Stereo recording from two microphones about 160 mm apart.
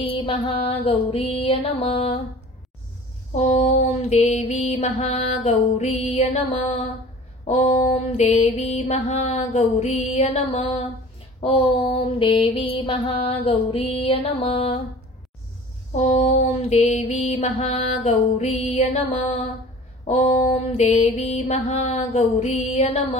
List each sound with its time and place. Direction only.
0.0 s mantra: 35° left (ahead or behind)
3.3 s mantra: 45° left (ahead or behind)
16.0 s mantra: 45° left (ahead or behind)